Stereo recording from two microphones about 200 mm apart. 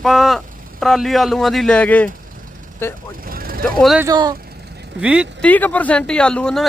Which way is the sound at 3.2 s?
45° right (ahead or behind).